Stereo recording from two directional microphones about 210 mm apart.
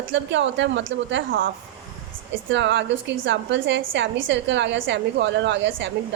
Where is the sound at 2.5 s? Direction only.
55° right (ahead or behind).